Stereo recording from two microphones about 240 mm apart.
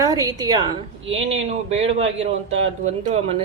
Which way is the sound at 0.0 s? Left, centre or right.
Centre.